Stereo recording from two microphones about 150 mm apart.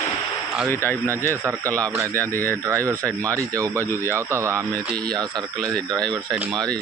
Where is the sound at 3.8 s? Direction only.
15° left (ahead or behind).